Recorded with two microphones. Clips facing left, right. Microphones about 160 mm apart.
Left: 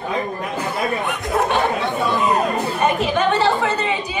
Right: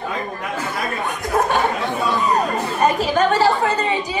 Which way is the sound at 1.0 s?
35° right (ahead or behind).